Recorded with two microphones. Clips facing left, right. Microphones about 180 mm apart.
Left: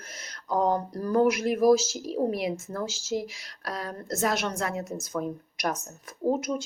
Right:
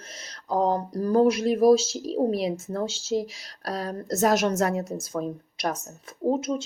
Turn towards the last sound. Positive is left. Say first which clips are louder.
# right 2 dB
turn(degrees=-25)  # may be behind; listen again after turning